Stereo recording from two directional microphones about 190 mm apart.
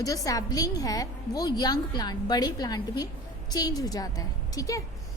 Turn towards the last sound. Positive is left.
turn(degrees=15)  # may be behind; listen again after turning